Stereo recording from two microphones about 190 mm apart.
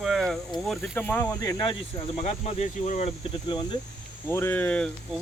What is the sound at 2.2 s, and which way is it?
Speech, 35° left (ahead or behind).